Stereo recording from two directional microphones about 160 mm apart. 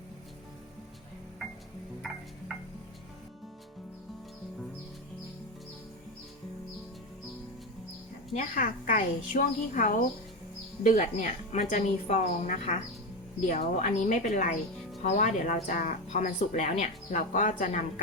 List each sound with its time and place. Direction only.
8.4 s a woman's voice: 60° left (ahead or behind)